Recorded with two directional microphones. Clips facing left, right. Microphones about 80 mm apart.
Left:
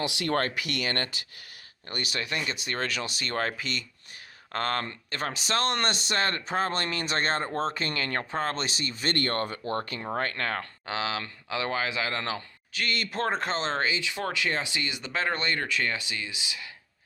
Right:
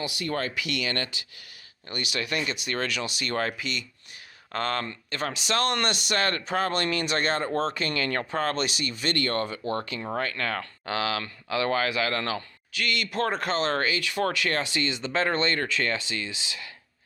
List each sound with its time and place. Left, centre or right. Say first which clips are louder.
0.0 s speech: left 2 dB; left
0.4 s speech: right 1 dB; left
12.7 s speech: right 2 dB; left; by 16.6 s centre